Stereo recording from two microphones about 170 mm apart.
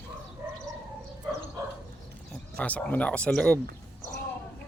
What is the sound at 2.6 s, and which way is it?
Speech, 10° left (ahead or behind).